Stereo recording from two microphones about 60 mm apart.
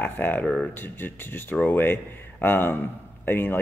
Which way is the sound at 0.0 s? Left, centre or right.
Left.